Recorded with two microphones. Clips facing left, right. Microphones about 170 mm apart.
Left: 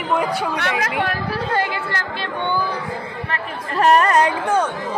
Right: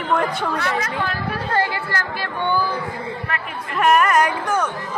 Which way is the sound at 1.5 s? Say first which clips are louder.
Right 2 dB; 20° left (ahead or behind).